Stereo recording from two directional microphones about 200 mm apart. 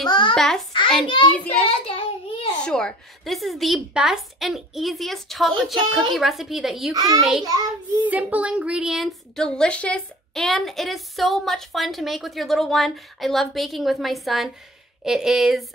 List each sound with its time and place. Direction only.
0.1 s a child's voice: 25° left (ahead or behind)
1.6 s child singing: 25° left (ahead or behind)
2.6 s a child's voice: 5° left (ahead or behind)
6.9 s a child's voice: 20° right (ahead or behind)
7.2 s a child's voice: centre (ahead or behind)
7.4 s a child's voice: 20° right (ahead or behind); by 15.6 s centre (ahead or behind)